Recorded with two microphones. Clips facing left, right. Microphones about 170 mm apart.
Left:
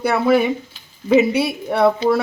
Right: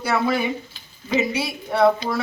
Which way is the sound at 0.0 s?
55° left (ahead or behind).